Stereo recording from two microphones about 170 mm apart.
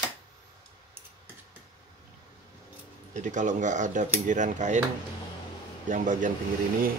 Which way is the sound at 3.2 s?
45° right (ahead or behind).